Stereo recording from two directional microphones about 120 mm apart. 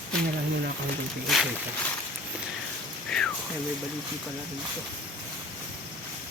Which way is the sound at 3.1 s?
5° left (ahead or behind).